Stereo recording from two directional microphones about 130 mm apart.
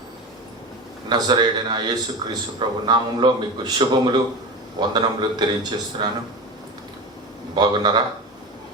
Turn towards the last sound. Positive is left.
turn(degrees=-35)  # may be behind; listen again after turning